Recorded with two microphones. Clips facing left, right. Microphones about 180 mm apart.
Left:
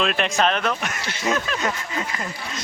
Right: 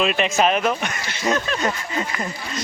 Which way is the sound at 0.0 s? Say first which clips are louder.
Right 2 dB; 5° right (ahead or behind).